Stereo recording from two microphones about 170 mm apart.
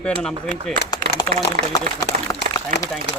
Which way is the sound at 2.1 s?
55° right (ahead or behind).